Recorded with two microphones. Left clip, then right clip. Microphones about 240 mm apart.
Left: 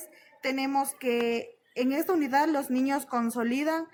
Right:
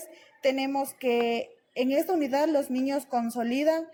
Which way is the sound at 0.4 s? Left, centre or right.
Centre.